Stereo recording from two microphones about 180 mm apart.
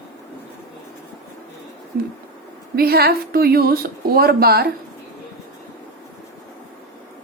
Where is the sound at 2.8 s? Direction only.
60° right (ahead or behind).